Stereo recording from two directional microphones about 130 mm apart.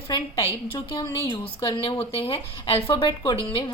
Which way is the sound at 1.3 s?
40° left (ahead or behind).